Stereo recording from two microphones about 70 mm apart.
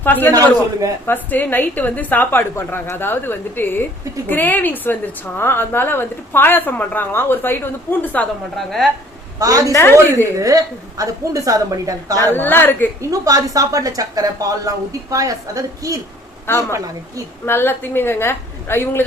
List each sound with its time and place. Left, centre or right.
0.0 s a man's voice: left
8.5 s speech: centre
9.4 s a woman's voice: right
9.7 s a woman's voice: left
10.4 s a woman's voice: right
12.3 s a woman's voice: left
13.0 s a woman's voice: right
16.5 s a woman's voice: left